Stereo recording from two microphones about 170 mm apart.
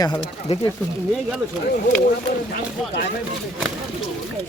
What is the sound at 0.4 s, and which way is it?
Speech, 35° left (ahead or behind).